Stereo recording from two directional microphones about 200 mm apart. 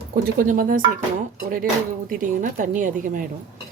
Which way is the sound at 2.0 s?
40° right (ahead or behind).